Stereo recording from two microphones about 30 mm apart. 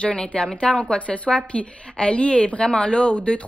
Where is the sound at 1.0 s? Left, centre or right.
Left.